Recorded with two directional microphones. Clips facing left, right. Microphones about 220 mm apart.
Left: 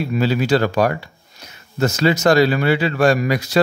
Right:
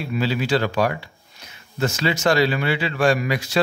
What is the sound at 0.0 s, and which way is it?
A man's voice, 45° left (ahead or behind).